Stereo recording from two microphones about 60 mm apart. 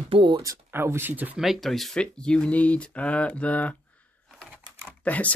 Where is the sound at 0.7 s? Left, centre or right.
Right.